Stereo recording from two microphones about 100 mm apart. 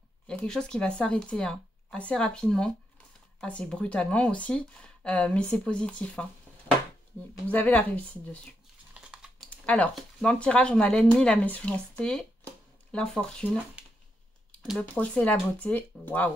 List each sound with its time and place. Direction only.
0.3 s speech: 10° left (ahead or behind)
6.7 s a sound: 55° right (ahead or behind)
7.4 s speech: 15° left (ahead or behind)
8.9 s typing: 10° right (ahead or behind)
9.7 s speech: 10° left (ahead or behind)
13.8 s a sound: 10° right (ahead or behind)
14.8 s speech: 15° left (ahead or behind)